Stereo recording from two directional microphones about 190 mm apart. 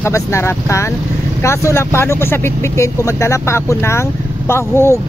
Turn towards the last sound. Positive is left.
turn(degrees=15)  # may be behind; listen again after turning